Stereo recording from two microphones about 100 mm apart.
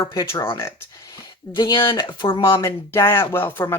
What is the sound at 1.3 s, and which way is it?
Speech, 45° left (ahead or behind).